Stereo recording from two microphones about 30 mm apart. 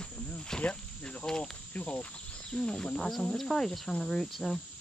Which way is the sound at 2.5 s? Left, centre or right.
Left.